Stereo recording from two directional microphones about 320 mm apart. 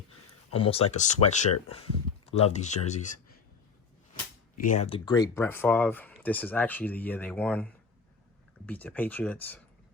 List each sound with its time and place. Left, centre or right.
0.5 s speech: centre
4.6 s speech: left; by 9.6 s centre